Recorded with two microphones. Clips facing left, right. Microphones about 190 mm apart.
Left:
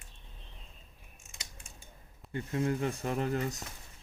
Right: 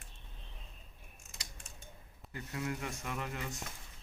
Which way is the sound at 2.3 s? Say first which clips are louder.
Left 8 dB; 30° left (ahead or behind).